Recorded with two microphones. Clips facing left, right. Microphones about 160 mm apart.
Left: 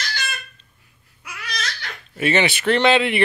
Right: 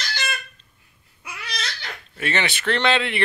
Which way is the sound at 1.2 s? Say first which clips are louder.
Left 2 dB; 25° right (ahead or behind).